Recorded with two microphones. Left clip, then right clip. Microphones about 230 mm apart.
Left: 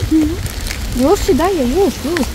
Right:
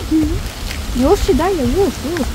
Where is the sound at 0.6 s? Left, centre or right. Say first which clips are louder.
Left 1 dB; left.